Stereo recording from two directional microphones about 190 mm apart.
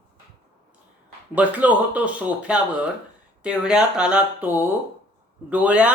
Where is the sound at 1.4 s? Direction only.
10° right (ahead or behind).